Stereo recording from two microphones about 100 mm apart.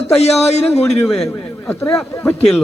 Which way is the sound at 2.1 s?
20° left (ahead or behind).